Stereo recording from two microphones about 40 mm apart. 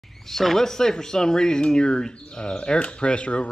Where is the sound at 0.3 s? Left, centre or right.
Centre.